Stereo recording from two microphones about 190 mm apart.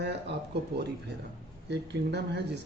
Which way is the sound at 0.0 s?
65° right (ahead or behind).